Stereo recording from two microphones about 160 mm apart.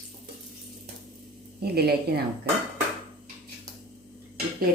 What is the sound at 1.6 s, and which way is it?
Speech, 80° right.